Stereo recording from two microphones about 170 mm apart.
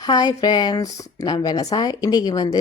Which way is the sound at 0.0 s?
20° left (ahead or behind).